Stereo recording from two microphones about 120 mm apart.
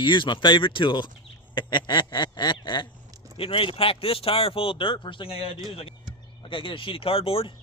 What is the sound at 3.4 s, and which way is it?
Speech, 50° left (ahead or behind).